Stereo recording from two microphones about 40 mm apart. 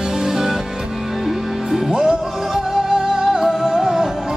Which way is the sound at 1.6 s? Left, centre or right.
Centre.